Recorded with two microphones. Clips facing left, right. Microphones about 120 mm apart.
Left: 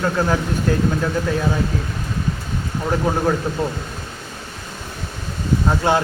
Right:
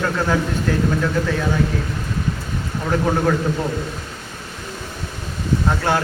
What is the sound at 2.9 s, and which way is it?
Speech, 15° left (ahead or behind).